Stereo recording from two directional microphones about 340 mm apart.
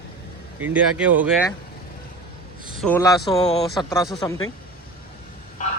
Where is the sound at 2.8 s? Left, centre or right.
Centre.